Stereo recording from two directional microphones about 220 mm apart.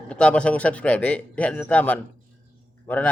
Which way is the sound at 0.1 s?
5° left (ahead or behind).